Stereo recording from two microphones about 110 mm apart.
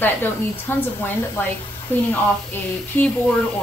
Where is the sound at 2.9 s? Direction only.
15° left (ahead or behind).